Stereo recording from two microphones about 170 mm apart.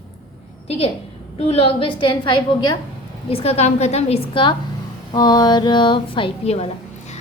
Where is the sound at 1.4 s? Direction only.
35° left (ahead or behind).